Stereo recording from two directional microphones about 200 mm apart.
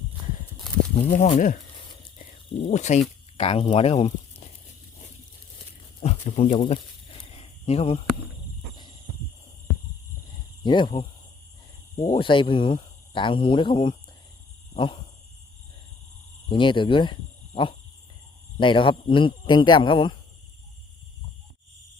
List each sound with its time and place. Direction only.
1.1 s speech: 35° left (ahead or behind)
5.5 s a sound: 30° left (ahead or behind)
10.6 s speech: 25° left (ahead or behind)
12.0 s speech: 25° left (ahead or behind)
14.7 s a sound: 25° left (ahead or behind)
16.5 s speech: 25° left (ahead or behind)